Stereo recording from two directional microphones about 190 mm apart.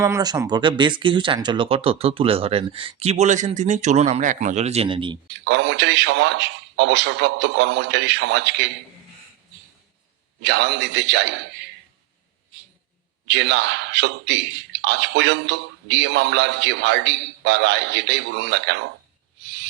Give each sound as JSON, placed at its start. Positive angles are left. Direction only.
{"t": 0.0, "sound": "speech", "side_deg": -20}
{"t": 5.5, "sound": "a man's voice", "side_deg": -65}
{"t": 10.4, "sound": "a man's voice", "side_deg": -65}
{"t": 13.2, "sound": "a man's voice", "side_deg": -65}